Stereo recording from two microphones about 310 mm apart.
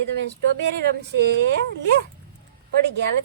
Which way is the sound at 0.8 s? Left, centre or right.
Right.